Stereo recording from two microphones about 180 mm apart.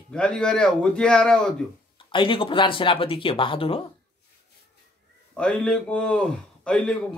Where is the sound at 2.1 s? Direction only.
30° left (ahead or behind).